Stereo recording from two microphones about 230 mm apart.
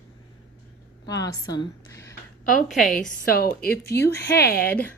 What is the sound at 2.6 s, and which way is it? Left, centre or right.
Speech, centre.